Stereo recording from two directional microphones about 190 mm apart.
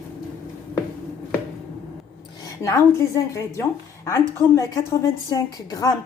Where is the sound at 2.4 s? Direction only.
15° left (ahead or behind).